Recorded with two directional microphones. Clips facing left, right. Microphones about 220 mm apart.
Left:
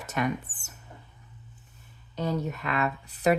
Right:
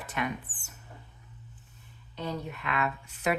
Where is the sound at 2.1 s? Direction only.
40° left (ahead or behind).